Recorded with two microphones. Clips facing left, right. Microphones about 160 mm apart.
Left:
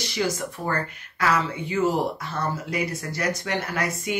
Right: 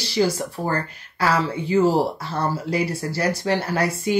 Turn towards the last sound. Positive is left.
turn(degrees=-30)  # may be behind; listen again after turning